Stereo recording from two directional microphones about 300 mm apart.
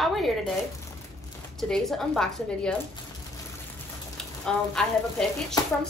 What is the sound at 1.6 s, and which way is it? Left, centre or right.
A woman's voice, centre.